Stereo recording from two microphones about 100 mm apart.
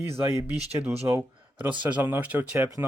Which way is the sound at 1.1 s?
30° right (ahead or behind).